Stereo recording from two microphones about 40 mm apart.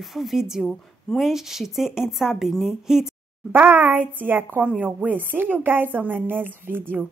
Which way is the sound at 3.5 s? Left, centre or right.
Right.